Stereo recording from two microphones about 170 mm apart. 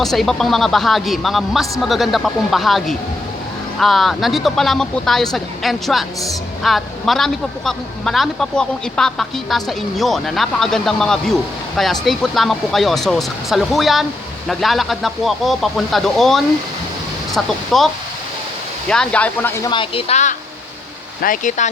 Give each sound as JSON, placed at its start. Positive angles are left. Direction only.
{"t": 0.0, "sound": "a woman's voice", "side_deg": 0}
{"t": 18.9, "sound": "speech", "side_deg": 5}
{"t": 19.7, "sound": "speech", "side_deg": 30}
{"t": 21.2, "sound": "speech", "side_deg": 50}